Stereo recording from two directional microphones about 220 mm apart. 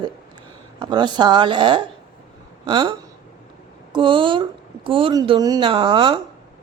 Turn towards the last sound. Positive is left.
turn(degrees=-20)  # may be behind; listen again after turning